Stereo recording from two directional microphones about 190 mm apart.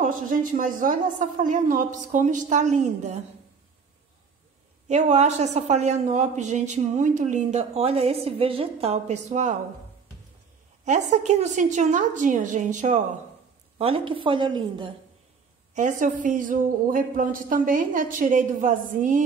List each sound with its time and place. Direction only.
0.0 s speech: 45° right (ahead or behind)
4.8 s a woman's voice: 35° right (ahead or behind)
10.9 s a woman's voice: 35° right (ahead or behind)
13.7 s a woman's voice: 30° right (ahead or behind)
15.7 s speech: 40° right (ahead or behind)